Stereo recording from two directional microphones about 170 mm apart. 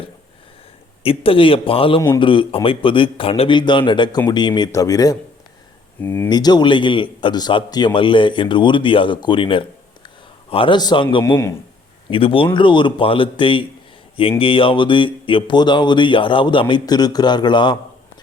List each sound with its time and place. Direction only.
1.0 s speech: 35° left (ahead or behind); by 6.2 s 10° left (ahead or behind)
6.2 s speech: 25° left (ahead or behind)